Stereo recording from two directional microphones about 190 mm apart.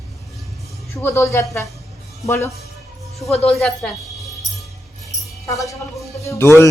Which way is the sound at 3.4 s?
Centre (ahead or behind).